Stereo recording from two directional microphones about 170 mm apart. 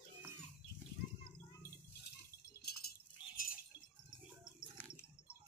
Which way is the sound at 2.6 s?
70° left (ahead or behind).